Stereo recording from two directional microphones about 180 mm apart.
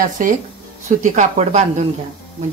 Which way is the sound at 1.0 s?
40° right (ahead or behind).